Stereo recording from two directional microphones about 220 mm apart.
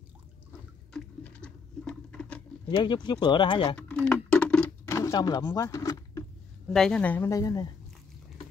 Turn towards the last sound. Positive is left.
turn(degrees=15)  # may be behind; listen again after turning